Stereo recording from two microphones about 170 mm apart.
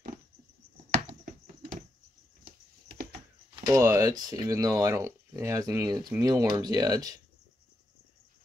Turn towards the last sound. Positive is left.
turn(degrees=-20)  # may be behind; listen again after turning